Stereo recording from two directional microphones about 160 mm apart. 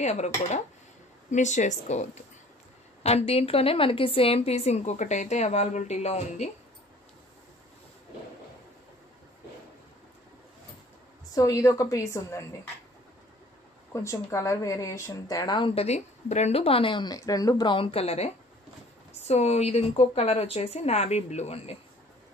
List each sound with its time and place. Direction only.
0.0 s speech: 45° left (ahead or behind)
1.3 s a woman's voice: 50° left (ahead or behind)
11.3 s speech: 20° left (ahead or behind)
13.9 s a woman's voice: 20° left (ahead or behind); by 21.7 s 40° left (ahead or behind)